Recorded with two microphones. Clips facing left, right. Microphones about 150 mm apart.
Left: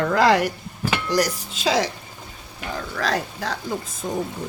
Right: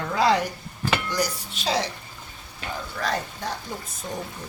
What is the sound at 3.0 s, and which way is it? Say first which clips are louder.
Speech: left 3 dB; 90° left.